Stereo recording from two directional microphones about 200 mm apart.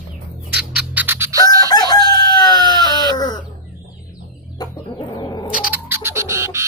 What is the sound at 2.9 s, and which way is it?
Livestock, 20° right (ahead or behind).